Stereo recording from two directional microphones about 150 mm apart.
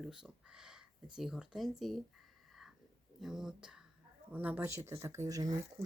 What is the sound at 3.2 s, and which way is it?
Speech, 5° right (ahead or behind).